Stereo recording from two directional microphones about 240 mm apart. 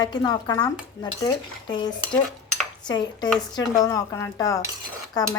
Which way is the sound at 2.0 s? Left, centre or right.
Centre.